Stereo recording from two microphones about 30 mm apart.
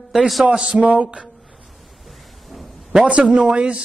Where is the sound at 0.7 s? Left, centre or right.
Right.